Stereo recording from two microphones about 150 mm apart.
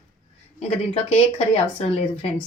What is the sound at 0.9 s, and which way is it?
Speech, 40° left (ahead or behind).